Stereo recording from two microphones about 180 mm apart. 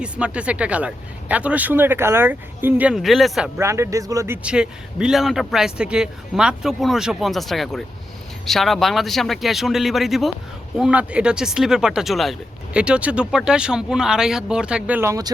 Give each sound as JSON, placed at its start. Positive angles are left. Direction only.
{"t": 0.0, "sound": "speech", "side_deg": -5}
{"t": 3.6, "sound": "speech", "side_deg": -15}
{"t": 4.4, "sound": "speech", "side_deg": -5}